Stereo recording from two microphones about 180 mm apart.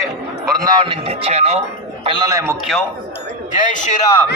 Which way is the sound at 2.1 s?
25° right (ahead or behind).